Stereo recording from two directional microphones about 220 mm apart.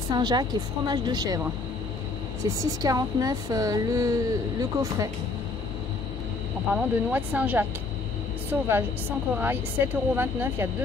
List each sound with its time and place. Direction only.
0.1 s a woman's voice: 20° right (ahead or behind)
6.7 s a woman's voice: 5° right (ahead or behind)